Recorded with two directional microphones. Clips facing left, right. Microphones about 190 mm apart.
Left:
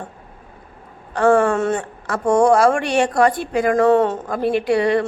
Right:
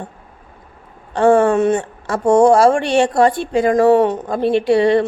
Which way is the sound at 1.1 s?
25° right (ahead or behind).